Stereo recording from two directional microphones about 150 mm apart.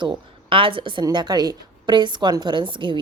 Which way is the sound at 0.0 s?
35° right (ahead or behind).